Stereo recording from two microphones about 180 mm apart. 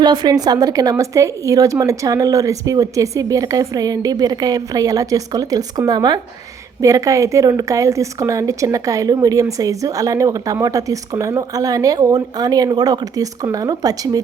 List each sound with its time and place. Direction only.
0.0 s a woman's voice: 25° right (ahead or behind)